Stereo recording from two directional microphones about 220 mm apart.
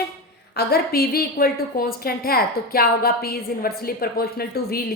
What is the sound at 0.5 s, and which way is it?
A woman's voice, 45° left (ahead or behind).